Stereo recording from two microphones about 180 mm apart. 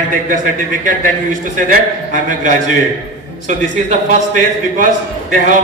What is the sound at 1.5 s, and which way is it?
Speech, 45° right (ahead or behind).